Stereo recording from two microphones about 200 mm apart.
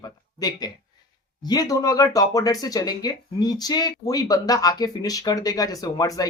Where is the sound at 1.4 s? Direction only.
20° left (ahead or behind).